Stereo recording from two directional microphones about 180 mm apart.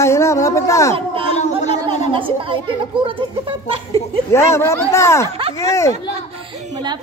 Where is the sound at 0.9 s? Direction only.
30° right (ahead or behind).